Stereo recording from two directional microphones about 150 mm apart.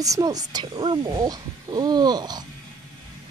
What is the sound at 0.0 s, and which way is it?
Speech, 25° right (ahead or behind).